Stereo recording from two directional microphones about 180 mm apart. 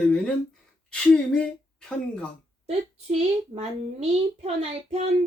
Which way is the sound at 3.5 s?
35° right (ahead or behind).